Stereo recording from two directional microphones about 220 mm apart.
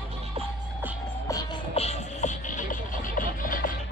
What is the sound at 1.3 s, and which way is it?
Music, 20° left (ahead or behind).